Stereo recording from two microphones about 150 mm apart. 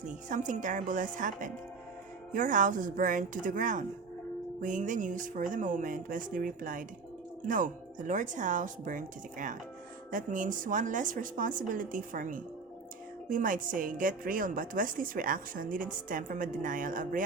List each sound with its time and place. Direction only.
0.0 s a woman's voice: 55° right (ahead or behind)